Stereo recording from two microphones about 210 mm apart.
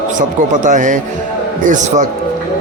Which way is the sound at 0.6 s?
35° right (ahead or behind).